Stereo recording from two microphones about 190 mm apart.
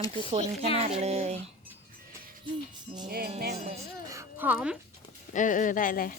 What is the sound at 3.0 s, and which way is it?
Music, 55° right (ahead or behind).